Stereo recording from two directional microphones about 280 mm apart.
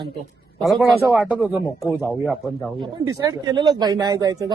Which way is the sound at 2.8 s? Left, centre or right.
Centre.